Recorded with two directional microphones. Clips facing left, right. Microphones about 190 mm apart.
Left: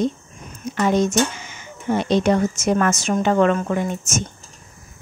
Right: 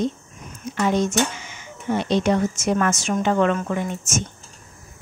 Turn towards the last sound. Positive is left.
turn(degrees=40)  # may be behind; listen again after turning